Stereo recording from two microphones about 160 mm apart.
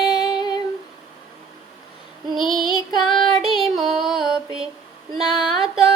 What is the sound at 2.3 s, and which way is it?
Child singing, centre (ahead or behind).